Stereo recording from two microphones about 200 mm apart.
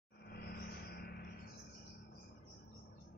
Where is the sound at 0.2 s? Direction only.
55° left (ahead or behind).